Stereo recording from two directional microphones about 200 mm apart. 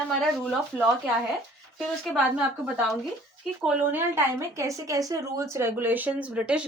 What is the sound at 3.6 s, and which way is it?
A woman's voice, 10° right (ahead or behind).